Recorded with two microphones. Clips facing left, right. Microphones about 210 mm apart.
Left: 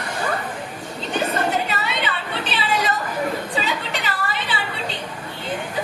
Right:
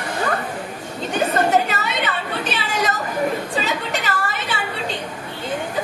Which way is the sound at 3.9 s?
45° right (ahead or behind).